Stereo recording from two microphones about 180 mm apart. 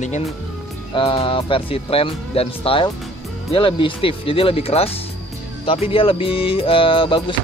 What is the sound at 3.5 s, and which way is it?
Music, 30° left (ahead or behind).